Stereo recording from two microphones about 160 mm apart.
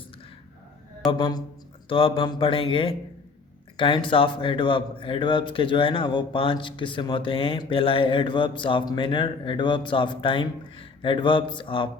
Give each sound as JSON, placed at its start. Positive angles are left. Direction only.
{"t": 1.0, "sound": "speech", "side_deg": 30}